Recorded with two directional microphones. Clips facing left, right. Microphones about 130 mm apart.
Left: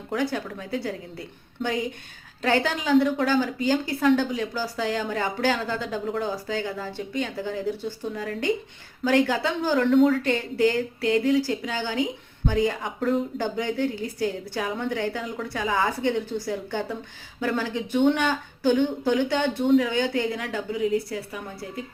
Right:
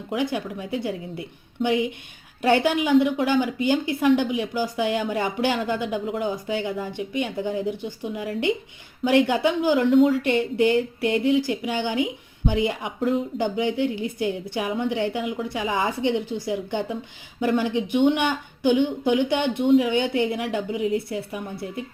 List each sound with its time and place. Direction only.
0.1 s a woman's voice: 15° right (ahead or behind)
2.4 s a woman's voice: 15° right (ahead or behind)